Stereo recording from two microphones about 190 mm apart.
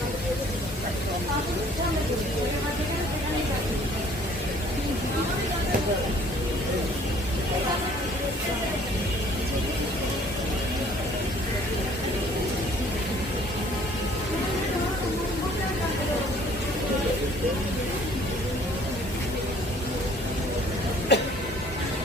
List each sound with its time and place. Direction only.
21.1 s music: 65° left (ahead or behind)